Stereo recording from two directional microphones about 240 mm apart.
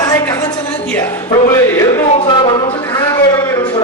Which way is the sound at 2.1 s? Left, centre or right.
Centre.